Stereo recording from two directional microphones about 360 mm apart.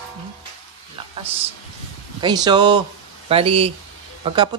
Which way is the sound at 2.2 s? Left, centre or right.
Centre.